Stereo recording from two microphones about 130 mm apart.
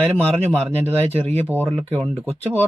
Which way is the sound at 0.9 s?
50° right (ahead or behind).